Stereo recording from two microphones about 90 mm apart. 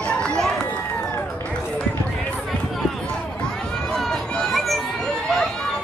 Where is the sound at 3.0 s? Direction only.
10° left (ahead or behind).